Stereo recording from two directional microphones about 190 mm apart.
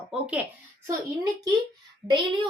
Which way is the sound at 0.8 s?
15° right (ahead or behind).